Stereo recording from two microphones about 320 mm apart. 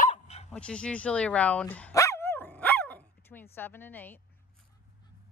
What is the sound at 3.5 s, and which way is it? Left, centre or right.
Speech, centre.